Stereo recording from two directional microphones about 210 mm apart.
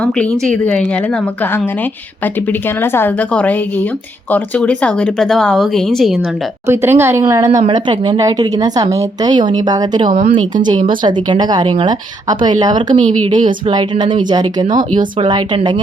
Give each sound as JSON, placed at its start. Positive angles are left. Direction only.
{"t": 0.0, "sound": "speech", "side_deg": 5}
{"t": 6.7, "sound": "speech", "side_deg": -10}
{"t": 13.0, "sound": "speech", "side_deg": -35}
{"t": 13.3, "sound": "speech", "side_deg": -20}